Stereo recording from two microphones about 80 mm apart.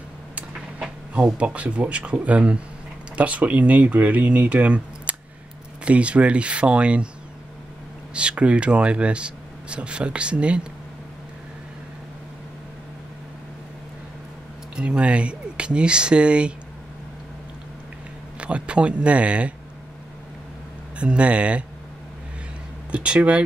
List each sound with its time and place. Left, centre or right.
0.4 s speech: centre
8.1 s speech: centre
14.8 s speech: centre
18.4 s speech: centre
21.0 s speech: centre
22.8 s speech: centre